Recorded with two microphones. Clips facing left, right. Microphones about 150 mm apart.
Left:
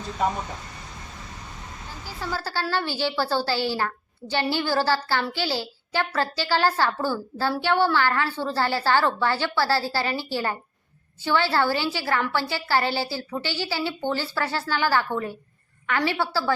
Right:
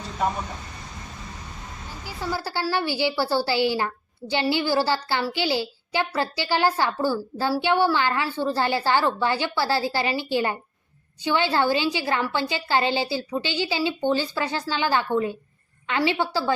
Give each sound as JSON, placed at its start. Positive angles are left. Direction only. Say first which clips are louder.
{"t": 2.0, "sound": "a woman's voice", "louder": "right 2 dB", "side_deg": -15}